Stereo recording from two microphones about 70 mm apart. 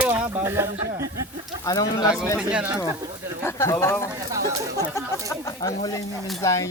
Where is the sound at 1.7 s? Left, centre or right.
Left.